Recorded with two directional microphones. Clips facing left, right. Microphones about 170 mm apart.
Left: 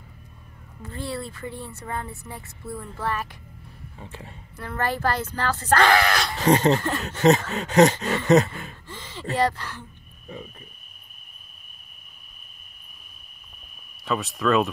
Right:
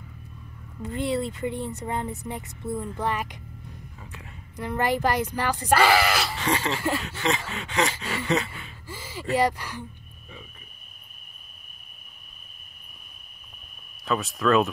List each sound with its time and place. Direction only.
0.8 s speech: 20° right (ahead or behind)
4.0 s speech: 30° left (ahead or behind)
4.6 s speech: 15° right (ahead or behind)
6.3 s speech: 40° left (ahead or behind)
8.3 s a sound: 45° left (ahead or behind)
8.8 s a sound: 10° right (ahead or behind)
9.3 s speech: 10° right (ahead or behind)
14.0 s speech: centre (ahead or behind)